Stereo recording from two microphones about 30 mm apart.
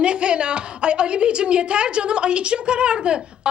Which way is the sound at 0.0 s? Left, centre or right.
Right.